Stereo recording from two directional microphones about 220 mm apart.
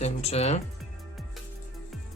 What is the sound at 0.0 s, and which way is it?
Speech, 30° left (ahead or behind).